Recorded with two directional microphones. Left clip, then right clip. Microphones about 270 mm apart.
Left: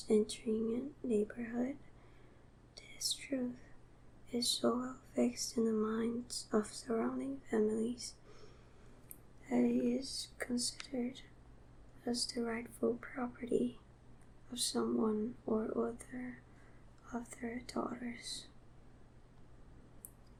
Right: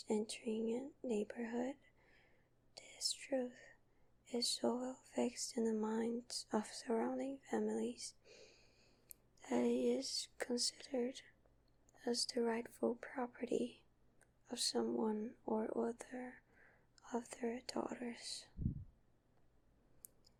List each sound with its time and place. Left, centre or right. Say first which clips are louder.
0.1 s speech: left 8 dB; right
2.7 s whispering: left 4 dB; right
4.3 s speech: left 4 dB; right